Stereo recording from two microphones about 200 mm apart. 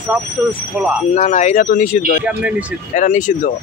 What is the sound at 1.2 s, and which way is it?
Speech, 35° left (ahead or behind).